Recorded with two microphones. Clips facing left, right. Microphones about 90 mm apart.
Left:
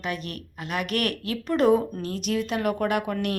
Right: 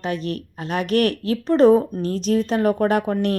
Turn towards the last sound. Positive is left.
turn(degrees=-35)  # may be behind; listen again after turning